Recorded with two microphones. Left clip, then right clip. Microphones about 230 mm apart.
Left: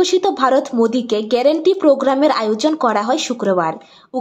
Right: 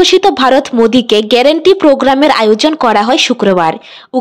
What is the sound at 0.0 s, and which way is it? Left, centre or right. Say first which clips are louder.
Speech: right 7 dB; right.